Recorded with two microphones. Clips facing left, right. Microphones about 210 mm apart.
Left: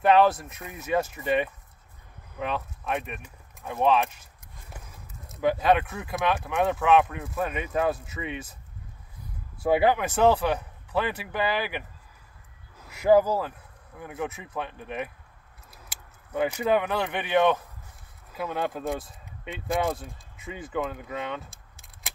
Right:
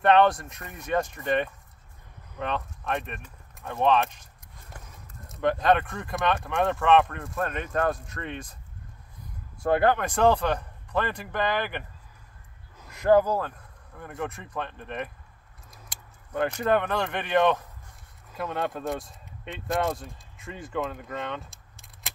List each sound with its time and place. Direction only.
0.0 s speech: 5° left (ahead or behind)
9.6 s speech: 5° left (ahead or behind)
12.8 s speech: 5° left (ahead or behind)